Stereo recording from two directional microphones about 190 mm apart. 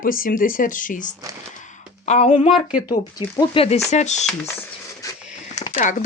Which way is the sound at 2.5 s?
5° right (ahead or behind).